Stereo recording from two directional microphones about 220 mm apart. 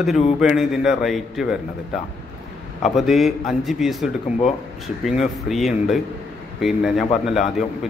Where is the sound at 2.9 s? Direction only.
Centre (ahead or behind).